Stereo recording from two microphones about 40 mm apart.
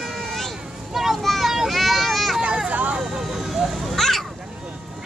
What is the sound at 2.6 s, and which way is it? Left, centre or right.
Vehicle, right.